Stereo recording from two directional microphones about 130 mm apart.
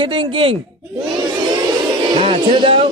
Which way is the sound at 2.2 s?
45° right (ahead or behind).